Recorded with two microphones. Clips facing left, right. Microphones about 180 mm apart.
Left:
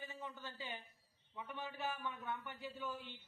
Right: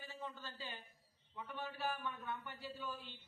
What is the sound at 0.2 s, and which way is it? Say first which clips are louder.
A man's voice: even; 15° left (ahead or behind).